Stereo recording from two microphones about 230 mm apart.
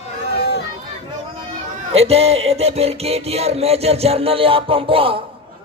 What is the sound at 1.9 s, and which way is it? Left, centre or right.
Music, right.